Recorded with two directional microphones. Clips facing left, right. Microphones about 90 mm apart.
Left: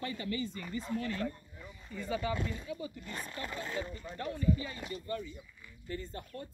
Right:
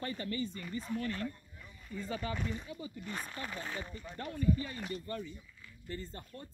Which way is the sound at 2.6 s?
30° right (ahead or behind).